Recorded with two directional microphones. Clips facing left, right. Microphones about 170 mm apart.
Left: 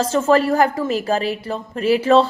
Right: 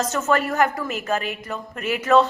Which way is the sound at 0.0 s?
30° left (ahead or behind).